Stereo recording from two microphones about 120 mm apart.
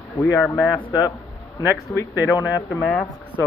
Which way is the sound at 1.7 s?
30° left (ahead or behind).